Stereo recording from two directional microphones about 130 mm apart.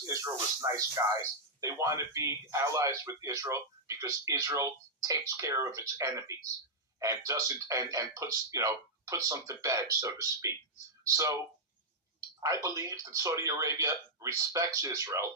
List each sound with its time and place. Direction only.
0.0 s speech: 25° right (ahead or behind)
12.4 s speech: 25° right (ahead or behind)